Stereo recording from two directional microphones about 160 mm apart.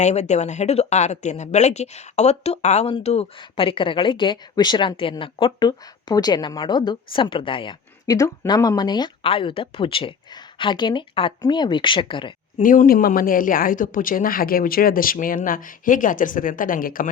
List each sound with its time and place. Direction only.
0.0 s speech: 45° left (ahead or behind)
12.5 s speech: 55° left (ahead or behind)